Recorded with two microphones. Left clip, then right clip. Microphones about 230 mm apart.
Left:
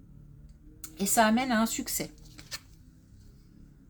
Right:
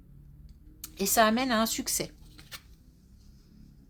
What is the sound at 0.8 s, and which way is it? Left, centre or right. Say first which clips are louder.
Speech: right 1 dB; right.